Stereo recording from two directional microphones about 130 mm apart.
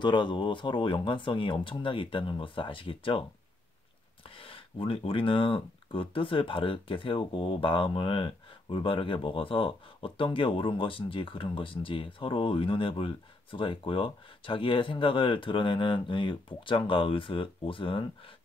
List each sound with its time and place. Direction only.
0.0 s speech: 35° left (ahead or behind)
4.4 s speech: 45° left (ahead or behind)